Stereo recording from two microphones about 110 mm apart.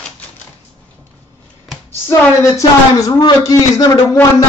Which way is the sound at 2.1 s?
30° left (ahead or behind).